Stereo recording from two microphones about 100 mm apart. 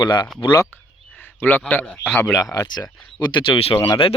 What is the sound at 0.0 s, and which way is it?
Speech, 45° left (ahead or behind).